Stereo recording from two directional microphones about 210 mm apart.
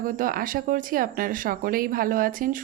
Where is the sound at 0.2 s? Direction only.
40° right (ahead or behind).